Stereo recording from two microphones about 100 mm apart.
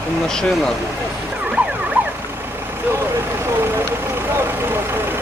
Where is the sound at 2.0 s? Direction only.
20° right (ahead or behind).